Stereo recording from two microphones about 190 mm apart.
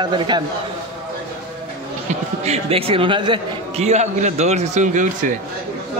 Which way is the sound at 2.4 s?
35° right (ahead or behind).